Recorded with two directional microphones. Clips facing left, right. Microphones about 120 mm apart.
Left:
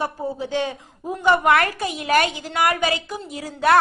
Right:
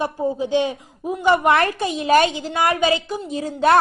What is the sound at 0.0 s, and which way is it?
A woman's voice, 15° right (ahead or behind).